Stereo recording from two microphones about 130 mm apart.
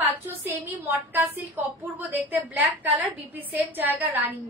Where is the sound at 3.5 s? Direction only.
15° right (ahead or behind).